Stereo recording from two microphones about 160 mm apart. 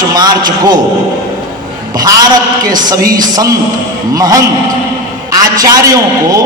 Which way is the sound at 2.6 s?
55° right (ahead or behind).